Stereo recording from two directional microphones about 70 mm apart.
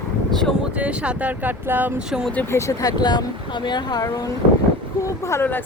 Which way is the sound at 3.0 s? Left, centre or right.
Left.